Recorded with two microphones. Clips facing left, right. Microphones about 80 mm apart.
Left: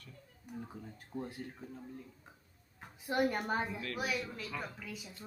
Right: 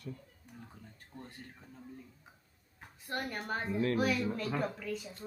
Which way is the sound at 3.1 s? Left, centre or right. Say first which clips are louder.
Left 5 dB; centre.